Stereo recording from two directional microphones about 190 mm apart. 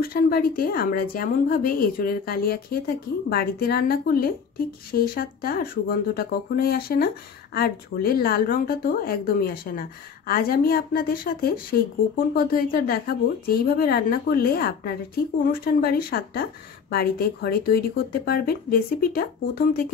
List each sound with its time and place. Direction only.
0.0 s speech: 50° left (ahead or behind)